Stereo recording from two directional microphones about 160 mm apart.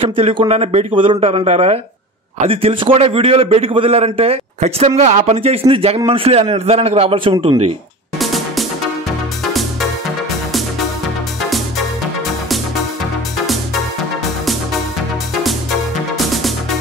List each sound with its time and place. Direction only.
0.0 s a man's voice: 35° right (ahead or behind)
8.2 s music: centre (ahead or behind)